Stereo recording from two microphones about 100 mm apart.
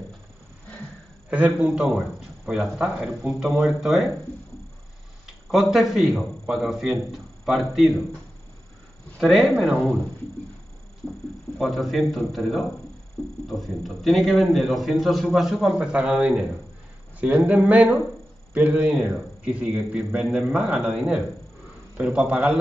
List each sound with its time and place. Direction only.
1.3 s a man's voice: 10° right (ahead or behind)
5.5 s a man's voice: centre (ahead or behind)
9.2 s a man's voice: centre (ahead or behind)
11.5 s a man's voice: centre (ahead or behind)
13.2 s speech: 15° left (ahead or behind)
13.6 s a man's voice: centre (ahead or behind)